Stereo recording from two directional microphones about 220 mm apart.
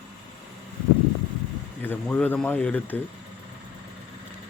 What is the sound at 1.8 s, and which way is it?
Speech, 10° left (ahead or behind).